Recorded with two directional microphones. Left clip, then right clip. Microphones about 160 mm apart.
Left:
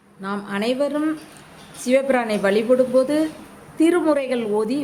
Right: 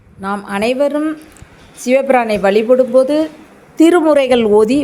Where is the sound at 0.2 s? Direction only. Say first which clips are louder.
Right 8 dB; 35° right (ahead or behind).